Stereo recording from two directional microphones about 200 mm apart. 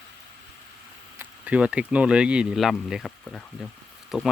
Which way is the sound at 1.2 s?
5° right (ahead or behind).